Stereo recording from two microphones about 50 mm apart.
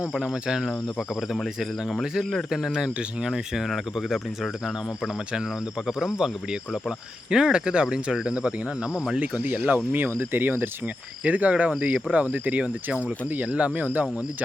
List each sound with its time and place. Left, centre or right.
0.2 s speech: centre
0.9 s speech: centre
2.5 s speech: centre
6.0 s speech: centre
9.4 s speech: right
11.3 s speech: right